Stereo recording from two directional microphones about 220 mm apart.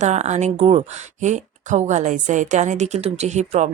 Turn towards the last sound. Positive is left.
turn(degrees=-30)  # may be behind; listen again after turning